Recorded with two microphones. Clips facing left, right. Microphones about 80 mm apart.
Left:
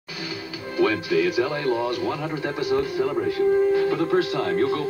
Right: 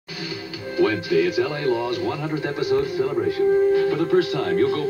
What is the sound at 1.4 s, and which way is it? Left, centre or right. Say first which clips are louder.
Speech: right 1 dB; left.